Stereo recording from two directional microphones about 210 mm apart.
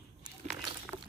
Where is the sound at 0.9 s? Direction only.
Centre (ahead or behind).